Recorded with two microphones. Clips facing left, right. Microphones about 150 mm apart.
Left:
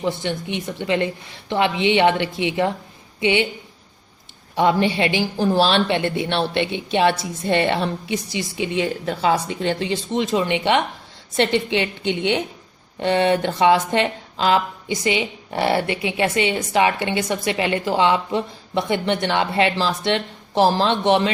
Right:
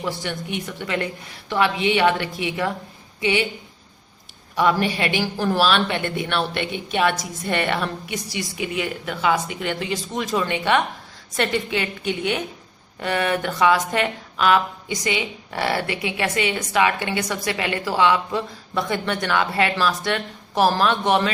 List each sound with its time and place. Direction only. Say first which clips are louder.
0.0 s a woman's voice: left 4 dB; 25° left (ahead or behind)
4.5 s speech: left 2 dB; 25° left (ahead or behind)